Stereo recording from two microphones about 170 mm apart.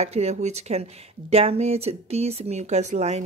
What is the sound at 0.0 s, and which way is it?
A woman's voice, 40° right (ahead or behind).